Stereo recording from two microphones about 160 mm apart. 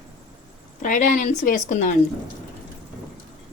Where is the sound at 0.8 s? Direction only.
55° left (ahead or behind).